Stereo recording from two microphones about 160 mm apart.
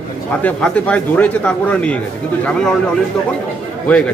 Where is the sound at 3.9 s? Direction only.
10° left (ahead or behind).